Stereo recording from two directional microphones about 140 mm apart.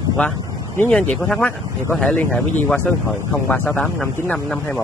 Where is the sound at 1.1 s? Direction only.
10° left (ahead or behind).